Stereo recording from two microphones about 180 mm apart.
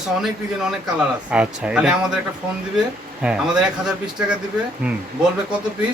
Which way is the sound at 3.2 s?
5° right (ahead or behind).